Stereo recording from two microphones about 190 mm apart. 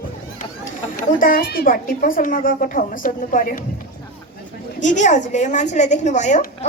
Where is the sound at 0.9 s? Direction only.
45° left (ahead or behind).